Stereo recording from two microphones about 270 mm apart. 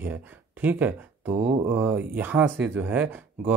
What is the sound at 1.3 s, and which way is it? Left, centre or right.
Mantra, right.